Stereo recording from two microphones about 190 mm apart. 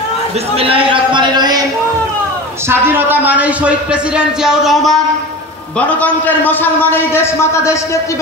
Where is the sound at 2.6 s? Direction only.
10° right (ahead or behind).